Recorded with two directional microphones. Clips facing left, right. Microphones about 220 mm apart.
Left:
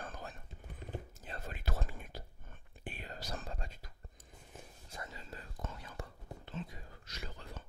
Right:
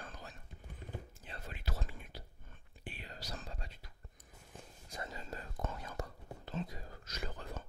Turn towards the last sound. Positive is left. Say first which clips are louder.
# right 4 dB
turn(degrees=-45)  # may be behind; listen again after turning